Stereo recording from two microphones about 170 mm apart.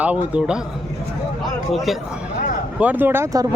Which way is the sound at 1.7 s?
Centre (ahead or behind).